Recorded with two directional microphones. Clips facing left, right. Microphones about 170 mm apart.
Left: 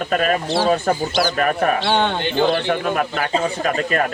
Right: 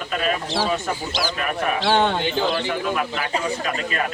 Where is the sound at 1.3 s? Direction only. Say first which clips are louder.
Left 6 dB; 45° left (ahead or behind).